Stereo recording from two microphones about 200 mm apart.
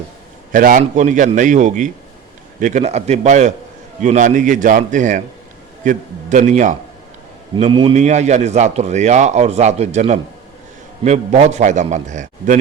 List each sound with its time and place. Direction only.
0.5 s a man's voice: 40° right (ahead or behind)
7.6 s a man's voice: 25° right (ahead or behind)